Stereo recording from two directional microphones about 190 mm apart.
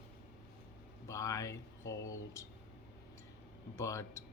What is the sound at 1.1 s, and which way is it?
Speech, 15° left (ahead or behind).